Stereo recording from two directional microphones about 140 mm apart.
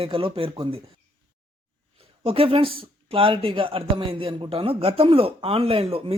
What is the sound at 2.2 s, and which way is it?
Speech, 40° right (ahead or behind).